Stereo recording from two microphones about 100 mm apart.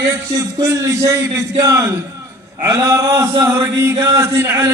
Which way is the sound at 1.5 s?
30° right (ahead or behind).